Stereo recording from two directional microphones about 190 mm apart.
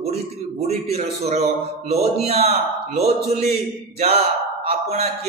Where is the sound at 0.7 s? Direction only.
35° right (ahead or behind).